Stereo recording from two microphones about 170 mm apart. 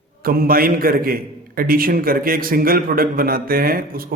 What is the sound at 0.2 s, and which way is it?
A man's voice, 60° right (ahead or behind).